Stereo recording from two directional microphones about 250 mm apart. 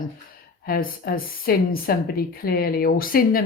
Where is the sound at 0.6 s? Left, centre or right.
Left.